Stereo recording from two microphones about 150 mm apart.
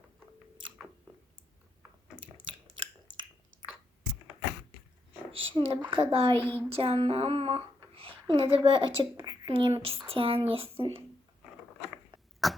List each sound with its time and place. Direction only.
2.7 s chewing: 35° right (ahead or behind)
5.3 s a woman's voice: 35° right (ahead or behind)
12.4 s cough: centre (ahead or behind)